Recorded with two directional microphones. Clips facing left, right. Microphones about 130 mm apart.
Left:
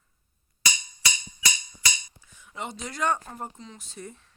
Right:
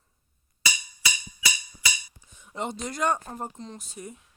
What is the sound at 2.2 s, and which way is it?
Dishes, 20° right (ahead or behind).